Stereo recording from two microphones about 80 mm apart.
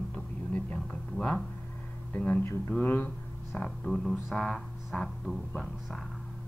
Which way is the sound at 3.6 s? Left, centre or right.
Centre.